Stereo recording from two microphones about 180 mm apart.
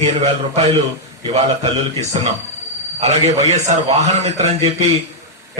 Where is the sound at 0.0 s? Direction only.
35° right (ahead or behind).